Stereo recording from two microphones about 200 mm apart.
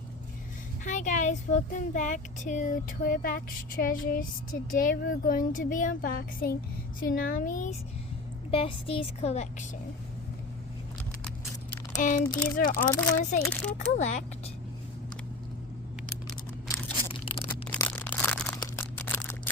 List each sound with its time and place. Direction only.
0.9 s speech: 40° left (ahead or behind)
8.4 s a woman's voice: 25° left (ahead or behind)
11.9 s speech: 40° left (ahead or behind)
13.4 s speech: 10° left (ahead or behind)
13.7 s speech: 35° left (ahead or behind)
17.1 s a sound: 25° left (ahead or behind)
17.5 s a sound: 10° left (ahead or behind)